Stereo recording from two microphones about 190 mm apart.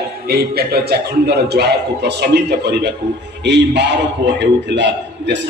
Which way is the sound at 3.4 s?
65° right (ahead or behind).